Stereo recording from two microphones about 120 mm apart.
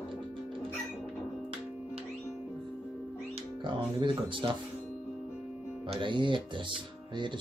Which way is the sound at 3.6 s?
45° right (ahead or behind).